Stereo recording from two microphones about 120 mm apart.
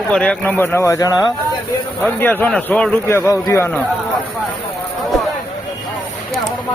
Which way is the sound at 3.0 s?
25° left (ahead or behind).